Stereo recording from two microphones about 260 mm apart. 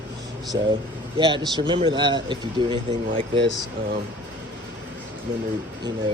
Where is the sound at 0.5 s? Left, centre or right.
Centre.